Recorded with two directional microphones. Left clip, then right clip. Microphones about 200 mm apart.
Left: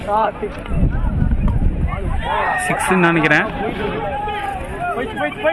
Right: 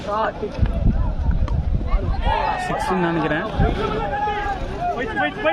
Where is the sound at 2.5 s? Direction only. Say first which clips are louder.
Left 5 dB; 30° left (ahead or behind).